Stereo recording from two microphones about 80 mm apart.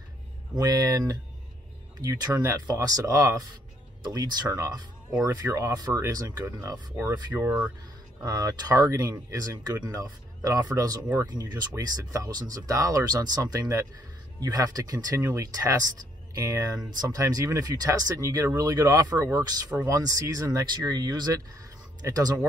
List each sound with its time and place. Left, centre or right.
0.6 s speech: right
2.0 s speech: right
4.0 s speech: right
8.2 s speech: right
11.8 s speech: right